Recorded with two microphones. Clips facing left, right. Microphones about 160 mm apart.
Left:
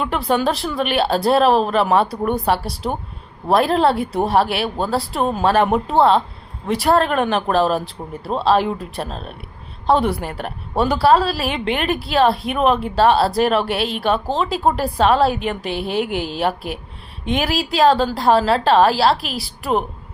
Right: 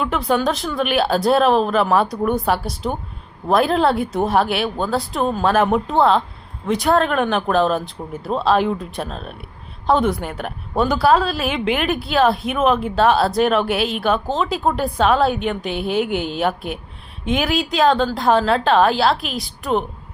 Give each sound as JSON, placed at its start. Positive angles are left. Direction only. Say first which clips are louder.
{"t": 0.0, "sound": "a woman's voice", "louder": "even", "side_deg": 0}